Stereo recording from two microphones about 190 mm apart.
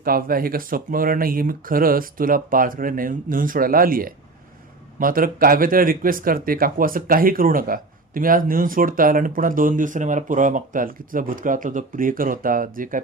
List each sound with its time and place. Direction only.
0.0 s speech: 50° right (ahead or behind)